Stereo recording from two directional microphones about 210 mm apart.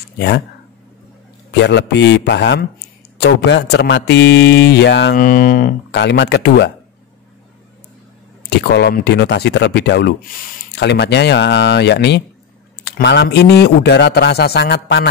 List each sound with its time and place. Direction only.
1.6 s a man's voice: 55° left (ahead or behind)
5.2 s a man's voice: 40° left (ahead or behind)
8.5 s a man's voice: 50° left (ahead or behind)